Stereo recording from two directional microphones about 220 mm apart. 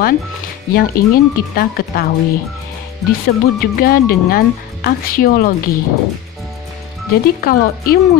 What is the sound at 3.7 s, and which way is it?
Speech, 40° left (ahead or behind).